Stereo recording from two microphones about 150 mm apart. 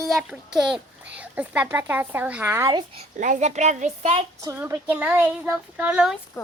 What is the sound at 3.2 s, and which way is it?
A child's voice, 50° right (ahead or behind).